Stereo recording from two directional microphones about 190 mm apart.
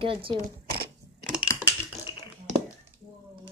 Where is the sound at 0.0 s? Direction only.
25° right (ahead or behind).